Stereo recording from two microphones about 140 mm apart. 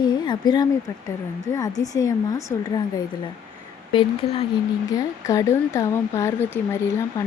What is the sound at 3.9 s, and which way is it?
Speech, 40° left (ahead or behind).